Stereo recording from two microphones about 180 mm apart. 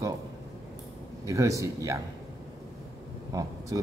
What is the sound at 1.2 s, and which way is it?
Speech, 15° right (ahead or behind).